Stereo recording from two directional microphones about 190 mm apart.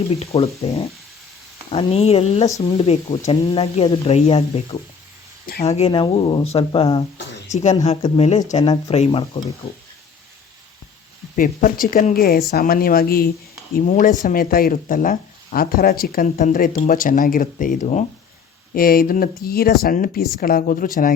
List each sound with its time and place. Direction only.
0.1 s speech: 35° left (ahead or behind)
11.3 s speech: 45° left (ahead or behind)